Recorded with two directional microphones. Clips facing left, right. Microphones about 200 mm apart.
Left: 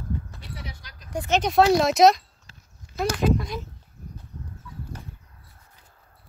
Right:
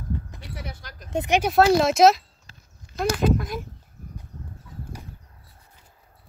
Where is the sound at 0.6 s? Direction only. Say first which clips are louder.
Right 3 dB; 50° right (ahead or behind).